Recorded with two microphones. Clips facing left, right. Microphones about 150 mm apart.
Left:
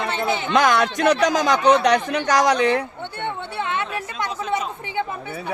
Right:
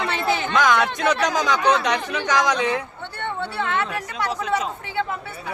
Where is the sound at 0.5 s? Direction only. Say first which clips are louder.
Left 2 dB; 60° left (ahead or behind).